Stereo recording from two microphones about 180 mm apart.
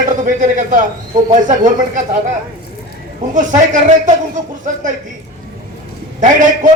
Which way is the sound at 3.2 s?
45° right (ahead or behind).